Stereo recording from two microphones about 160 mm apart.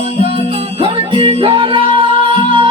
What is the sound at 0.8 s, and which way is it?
Music, 30° right (ahead or behind).